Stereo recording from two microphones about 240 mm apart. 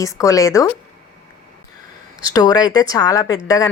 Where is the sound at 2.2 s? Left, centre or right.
Centre.